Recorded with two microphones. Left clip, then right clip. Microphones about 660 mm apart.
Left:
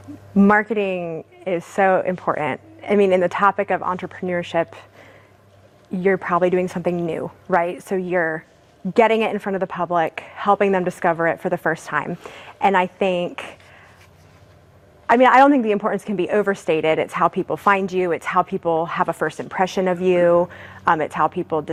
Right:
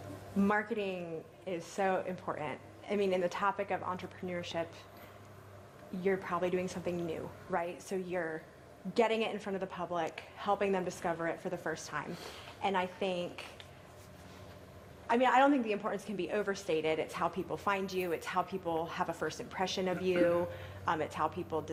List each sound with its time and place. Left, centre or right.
0.4 s a woman's voice: left
6.0 s a woman's voice: left
15.0 s a woman's voice: left